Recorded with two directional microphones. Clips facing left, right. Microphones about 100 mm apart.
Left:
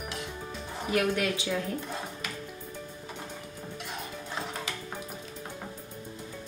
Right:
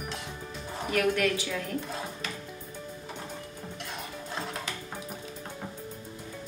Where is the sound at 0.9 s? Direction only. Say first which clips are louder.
Right 1 dB; 25° left (ahead or behind).